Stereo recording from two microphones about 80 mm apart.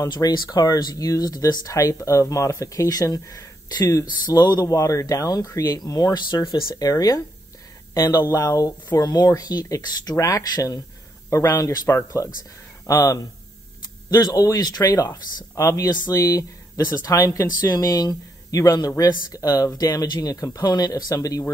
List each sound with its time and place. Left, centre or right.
0.1 s speech: left
4.6 s speech: left
6.1 s speech: left
6.7 s speech: left
20.6 s speech: left